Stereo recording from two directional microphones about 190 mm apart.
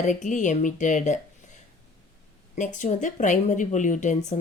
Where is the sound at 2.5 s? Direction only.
40° left (ahead or behind).